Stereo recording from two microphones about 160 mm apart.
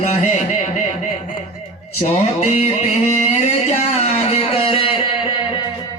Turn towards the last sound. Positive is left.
turn(degrees=35)  # may be behind; listen again after turning